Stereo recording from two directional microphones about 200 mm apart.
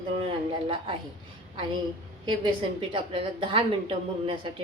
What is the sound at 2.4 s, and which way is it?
A woman's voice, 25° right (ahead or behind).